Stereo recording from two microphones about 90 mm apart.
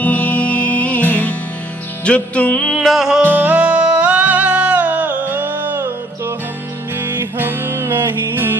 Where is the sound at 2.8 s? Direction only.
5° right (ahead or behind).